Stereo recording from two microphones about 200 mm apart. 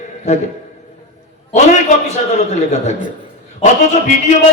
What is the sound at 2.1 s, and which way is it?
A man's voice, 35° left (ahead or behind).